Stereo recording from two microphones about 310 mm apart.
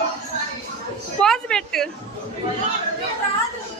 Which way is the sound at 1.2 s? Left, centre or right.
Centre.